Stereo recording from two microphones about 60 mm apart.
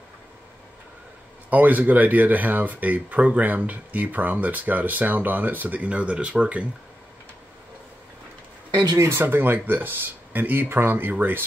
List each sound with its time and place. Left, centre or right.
1.5 s speech: right
8.9 s speech: right
9.2 s speech: right